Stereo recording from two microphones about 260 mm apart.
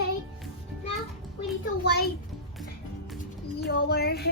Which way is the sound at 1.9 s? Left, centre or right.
Left.